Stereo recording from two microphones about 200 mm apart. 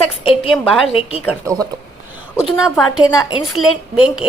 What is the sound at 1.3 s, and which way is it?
Speech, 15° right (ahead or behind).